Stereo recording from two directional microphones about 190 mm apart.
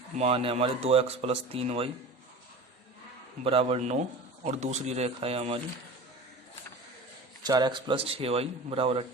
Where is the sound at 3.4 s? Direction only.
30° right (ahead or behind).